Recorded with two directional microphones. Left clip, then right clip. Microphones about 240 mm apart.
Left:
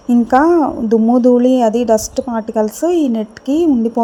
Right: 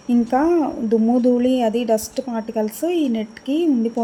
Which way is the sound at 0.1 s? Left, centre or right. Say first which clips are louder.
Left 7 dB; centre.